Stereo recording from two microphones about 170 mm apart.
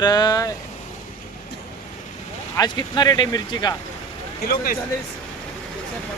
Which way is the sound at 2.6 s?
25° left (ahead or behind).